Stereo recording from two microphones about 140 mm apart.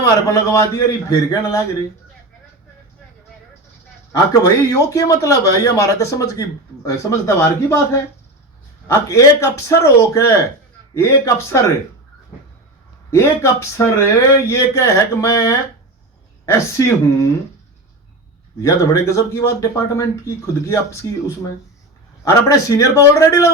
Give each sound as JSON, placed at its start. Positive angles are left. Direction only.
{"t": 0.0, "sound": "speech", "side_deg": 20}
{"t": 4.1, "sound": "speech", "side_deg": 25}
{"t": 8.9, "sound": "speech", "side_deg": 20}
{"t": 13.1, "sound": "speech", "side_deg": 20}
{"t": 18.6, "sound": "speech", "side_deg": 20}